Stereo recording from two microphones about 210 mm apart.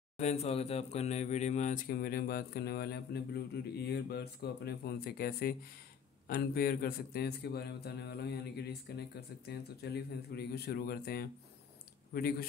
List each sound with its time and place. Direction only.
0.2 s speech: 30° left (ahead or behind); by 12.4 s 45° left (ahead or behind)